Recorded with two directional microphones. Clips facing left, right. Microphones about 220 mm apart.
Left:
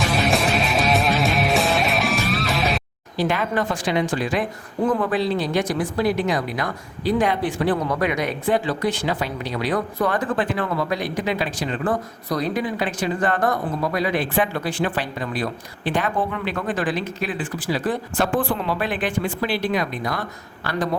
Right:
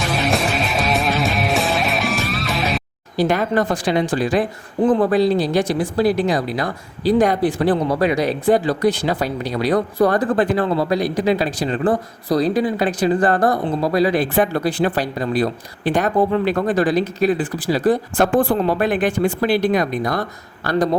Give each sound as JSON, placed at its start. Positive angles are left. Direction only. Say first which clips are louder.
{"t": 0.1, "sound": "music", "louder": "right 2 dB", "side_deg": 0}
{"t": 3.2, "sound": "speech", "louder": "right 5 dB", "side_deg": -40}